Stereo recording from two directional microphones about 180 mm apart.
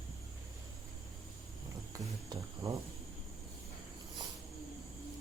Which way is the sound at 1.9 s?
20° right (ahead or behind).